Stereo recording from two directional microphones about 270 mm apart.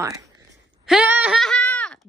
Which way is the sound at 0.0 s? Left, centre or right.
Centre.